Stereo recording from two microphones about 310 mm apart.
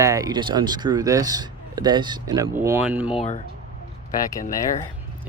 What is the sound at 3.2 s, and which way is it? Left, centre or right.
Speech, left.